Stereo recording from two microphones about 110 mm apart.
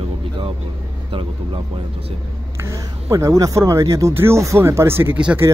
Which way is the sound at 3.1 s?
30° right (ahead or behind).